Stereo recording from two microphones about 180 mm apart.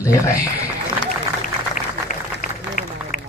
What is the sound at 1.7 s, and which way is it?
Applause, 45° left (ahead or behind).